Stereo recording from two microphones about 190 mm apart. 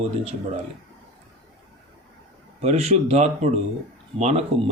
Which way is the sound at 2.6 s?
35° right (ahead or behind).